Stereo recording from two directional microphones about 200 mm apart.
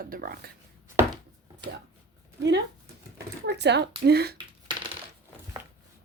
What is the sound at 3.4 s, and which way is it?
Speech, 60° right (ahead or behind).